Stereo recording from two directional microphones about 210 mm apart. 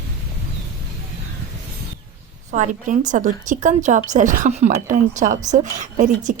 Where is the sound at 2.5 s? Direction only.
40° right (ahead or behind).